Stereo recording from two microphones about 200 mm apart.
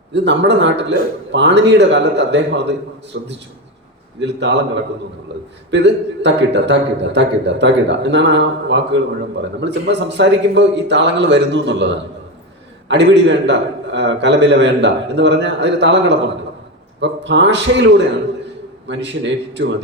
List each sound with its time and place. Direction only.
0.1 s a man's voice: 60° right (ahead or behind)